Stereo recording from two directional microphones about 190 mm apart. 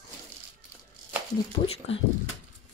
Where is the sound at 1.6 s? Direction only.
30° left (ahead or behind).